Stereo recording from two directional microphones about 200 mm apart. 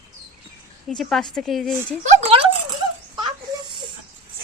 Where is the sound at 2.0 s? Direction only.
35° right (ahead or behind).